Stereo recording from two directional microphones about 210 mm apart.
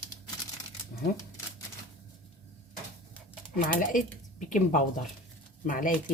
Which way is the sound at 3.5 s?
40° left (ahead or behind).